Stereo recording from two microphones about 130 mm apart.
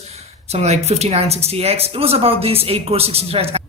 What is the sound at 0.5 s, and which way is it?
Speech, 55° right (ahead or behind).